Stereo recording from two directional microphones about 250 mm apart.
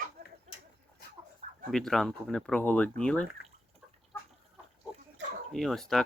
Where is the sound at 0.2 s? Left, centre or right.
Right.